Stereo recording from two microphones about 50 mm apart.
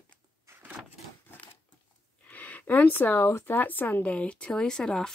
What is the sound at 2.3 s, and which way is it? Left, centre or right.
Speech, left.